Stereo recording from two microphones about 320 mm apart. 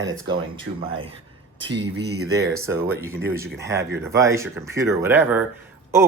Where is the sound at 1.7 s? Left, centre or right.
Right.